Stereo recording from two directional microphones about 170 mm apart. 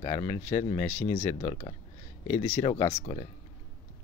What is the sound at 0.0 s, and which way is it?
Speech, 35° left (ahead or behind).